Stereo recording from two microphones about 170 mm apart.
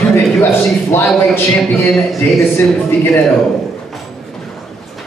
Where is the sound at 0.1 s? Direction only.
15° left (ahead or behind).